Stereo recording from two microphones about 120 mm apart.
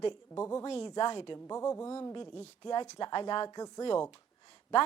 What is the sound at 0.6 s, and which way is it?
Speech, 55° left (ahead or behind).